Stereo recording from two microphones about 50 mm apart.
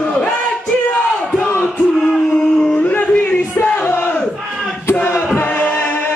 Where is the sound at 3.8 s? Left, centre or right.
Left.